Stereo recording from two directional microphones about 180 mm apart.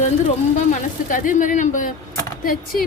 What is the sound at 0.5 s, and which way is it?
Speech, 45° left (ahead or behind).